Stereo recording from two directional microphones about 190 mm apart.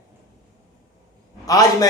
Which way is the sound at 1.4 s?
20° left (ahead or behind).